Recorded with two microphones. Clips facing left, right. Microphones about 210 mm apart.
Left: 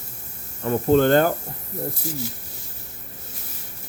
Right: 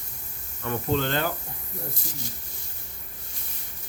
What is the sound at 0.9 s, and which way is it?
Speech, 50° left (ahead or behind).